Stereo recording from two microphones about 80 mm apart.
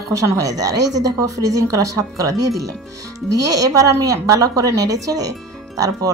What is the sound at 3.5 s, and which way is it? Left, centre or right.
Speech, right.